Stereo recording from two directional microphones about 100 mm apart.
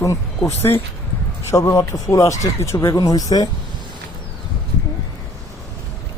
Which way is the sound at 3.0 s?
40° left (ahead or behind).